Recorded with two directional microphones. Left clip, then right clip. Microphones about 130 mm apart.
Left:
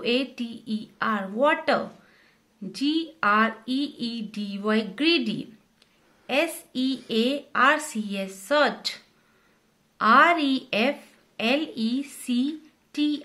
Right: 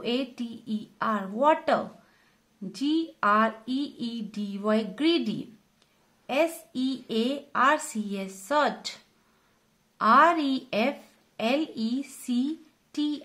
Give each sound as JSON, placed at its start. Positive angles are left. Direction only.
{"t": 0.0, "sound": "speech", "side_deg": -45}
{"t": 6.7, "sound": "speech", "side_deg": -45}
{"t": 9.9, "sound": "a woman's voice", "side_deg": -40}